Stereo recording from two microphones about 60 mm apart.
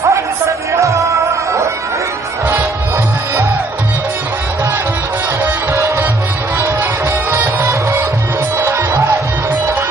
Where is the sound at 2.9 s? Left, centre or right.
Right.